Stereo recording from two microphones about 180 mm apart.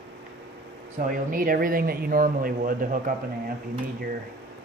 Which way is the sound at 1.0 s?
50° right (ahead or behind).